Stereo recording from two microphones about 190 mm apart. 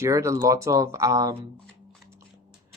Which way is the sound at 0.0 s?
15° right (ahead or behind).